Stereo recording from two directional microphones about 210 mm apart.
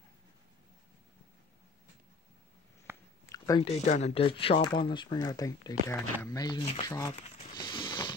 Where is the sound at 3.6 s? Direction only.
35° left (ahead or behind).